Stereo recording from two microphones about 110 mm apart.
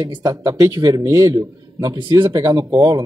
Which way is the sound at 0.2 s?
35° right (ahead or behind).